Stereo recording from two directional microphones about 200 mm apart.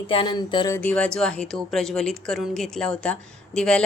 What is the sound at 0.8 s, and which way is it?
A woman's voice, 5° left (ahead or behind).